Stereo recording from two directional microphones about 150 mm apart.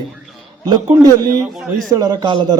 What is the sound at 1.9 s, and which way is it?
Speech, 25° right (ahead or behind).